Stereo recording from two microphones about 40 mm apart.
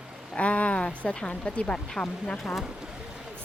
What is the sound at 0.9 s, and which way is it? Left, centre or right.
Speech, left.